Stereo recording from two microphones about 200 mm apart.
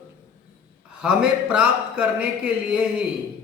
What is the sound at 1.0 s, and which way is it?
Speech, 5° right (ahead or behind).